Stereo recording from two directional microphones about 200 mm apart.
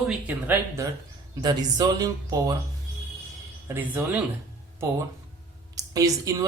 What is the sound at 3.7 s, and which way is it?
Speech, 10° right (ahead or behind).